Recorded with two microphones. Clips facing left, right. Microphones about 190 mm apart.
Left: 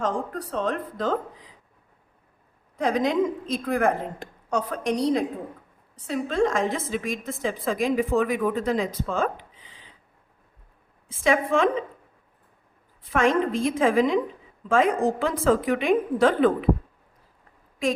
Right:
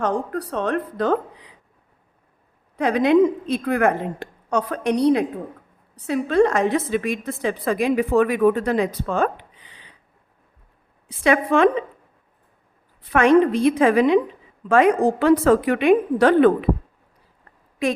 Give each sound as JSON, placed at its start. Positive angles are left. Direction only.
{"t": 0.0, "sound": "a woman's voice", "side_deg": -65}
{"t": 2.7, "sound": "a woman's voice", "side_deg": -65}
{"t": 11.1, "sound": "a woman's voice", "side_deg": -65}
{"t": 13.0, "sound": "a woman's voice", "side_deg": -65}